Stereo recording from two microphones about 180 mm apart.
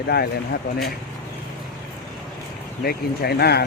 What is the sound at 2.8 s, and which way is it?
Speech, 60° left (ahead or behind).